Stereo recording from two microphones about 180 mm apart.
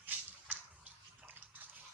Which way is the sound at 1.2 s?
10° right (ahead or behind).